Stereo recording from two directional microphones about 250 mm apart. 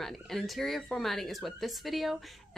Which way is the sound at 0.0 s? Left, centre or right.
Centre.